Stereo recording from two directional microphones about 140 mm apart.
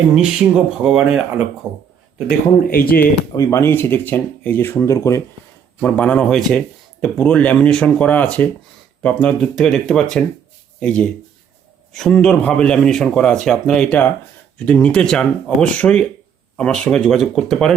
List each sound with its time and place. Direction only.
0.2 s a man's voice: 5° right (ahead or behind)
2.6 s speech: 90° left
3.3 s speech: 20° left (ahead or behind)
5.8 s a man's voice: 10° left (ahead or behind)